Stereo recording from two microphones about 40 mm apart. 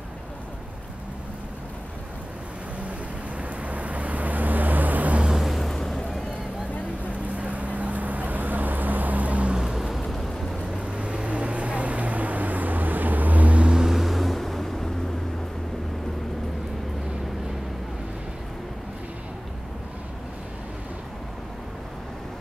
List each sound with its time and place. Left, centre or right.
3.3 s vehicle: right
5.3 s vehicle: centre
5.8 s a sound: centre
7.3 s vehicle: right
9.6 s a sound: centre
10.9 s vehicle: right
13.7 s vehicle: centre